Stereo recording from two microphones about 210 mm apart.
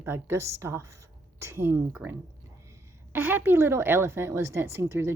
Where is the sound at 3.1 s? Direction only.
10° right (ahead or behind).